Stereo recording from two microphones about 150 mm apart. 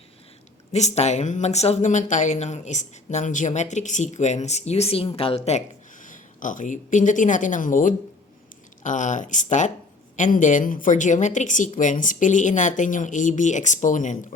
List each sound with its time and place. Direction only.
0.7 s speech: 50° left (ahead or behind)
5.5 s a woman's voice: 55° left (ahead or behind)